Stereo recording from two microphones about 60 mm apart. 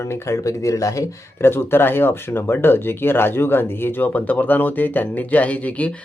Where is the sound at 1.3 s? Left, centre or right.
Left.